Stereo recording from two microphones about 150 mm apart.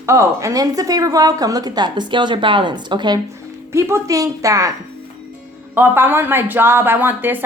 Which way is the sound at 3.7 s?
20° right (ahead or behind).